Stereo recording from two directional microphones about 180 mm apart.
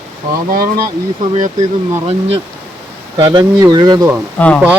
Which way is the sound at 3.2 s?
20° right (ahead or behind).